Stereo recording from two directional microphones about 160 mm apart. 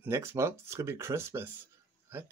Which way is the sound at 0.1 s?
15° right (ahead or behind).